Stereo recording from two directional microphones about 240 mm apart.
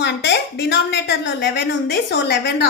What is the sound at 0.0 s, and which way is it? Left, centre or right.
A woman's voice, left.